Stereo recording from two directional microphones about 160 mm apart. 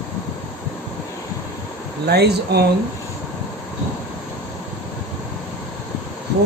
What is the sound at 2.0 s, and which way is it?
Speech, 90° right.